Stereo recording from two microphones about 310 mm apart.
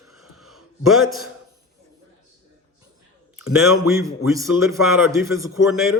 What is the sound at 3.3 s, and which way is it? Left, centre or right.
A man's voice, centre.